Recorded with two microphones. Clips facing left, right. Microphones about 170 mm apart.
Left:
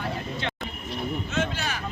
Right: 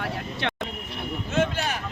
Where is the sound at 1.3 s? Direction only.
55° right (ahead or behind).